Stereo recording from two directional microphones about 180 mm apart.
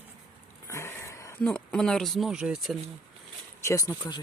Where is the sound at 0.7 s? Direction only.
15° left (ahead or behind).